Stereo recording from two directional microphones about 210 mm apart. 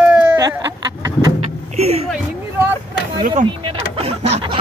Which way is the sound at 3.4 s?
25° right (ahead or behind).